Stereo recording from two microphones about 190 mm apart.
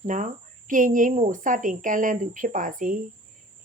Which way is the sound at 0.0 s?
40° right (ahead or behind).